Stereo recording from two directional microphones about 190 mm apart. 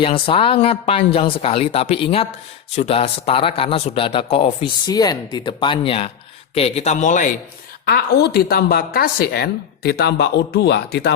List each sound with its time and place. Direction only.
0.0 s a man's voice: 30° left (ahead or behind)
7.9 s a woman's voice: 55° left (ahead or behind)